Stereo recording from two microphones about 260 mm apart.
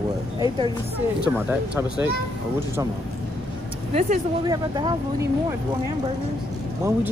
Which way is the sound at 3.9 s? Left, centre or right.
Right.